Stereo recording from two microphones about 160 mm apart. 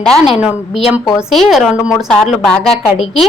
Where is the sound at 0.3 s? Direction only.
10° right (ahead or behind).